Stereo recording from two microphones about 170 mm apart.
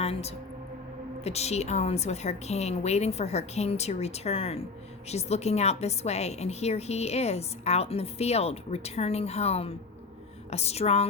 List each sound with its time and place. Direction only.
0.0 s a woman's voice: 40° left (ahead or behind)